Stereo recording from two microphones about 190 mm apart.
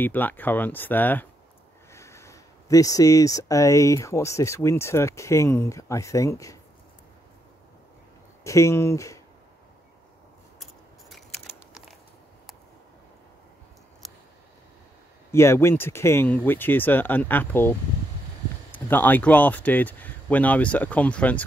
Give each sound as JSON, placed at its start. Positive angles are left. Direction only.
{"t": 0.0, "sound": "speech", "side_deg": 10}
{"t": 8.5, "sound": "speech", "side_deg": 15}
{"t": 10.6, "sound": "a sound", "side_deg": 0}
{"t": 15.3, "sound": "speech", "side_deg": 15}